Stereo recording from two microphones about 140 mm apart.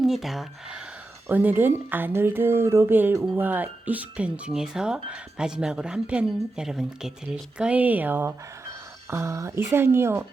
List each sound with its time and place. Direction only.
0.0 s speech: centre (ahead or behind)
1.3 s a woman's voice: 15° right (ahead or behind)